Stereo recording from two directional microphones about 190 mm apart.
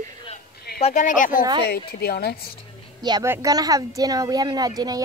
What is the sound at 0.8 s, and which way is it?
Speech, 40° left (ahead or behind).